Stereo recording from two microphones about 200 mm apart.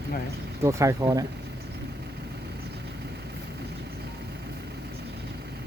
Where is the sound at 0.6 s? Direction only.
15° right (ahead or behind).